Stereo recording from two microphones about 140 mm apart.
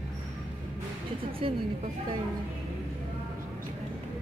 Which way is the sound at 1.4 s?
40° right (ahead or behind).